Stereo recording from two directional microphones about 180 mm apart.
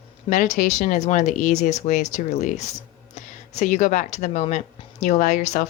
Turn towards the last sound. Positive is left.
turn(degrees=40)  # may be behind; listen again after turning